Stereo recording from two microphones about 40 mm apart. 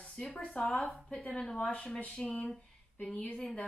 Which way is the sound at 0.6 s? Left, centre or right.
Left.